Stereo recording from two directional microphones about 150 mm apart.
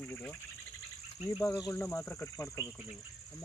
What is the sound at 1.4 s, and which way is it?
Speech, 20° left (ahead or behind).